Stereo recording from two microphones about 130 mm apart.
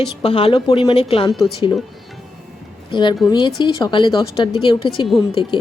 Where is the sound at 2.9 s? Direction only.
35° left (ahead or behind).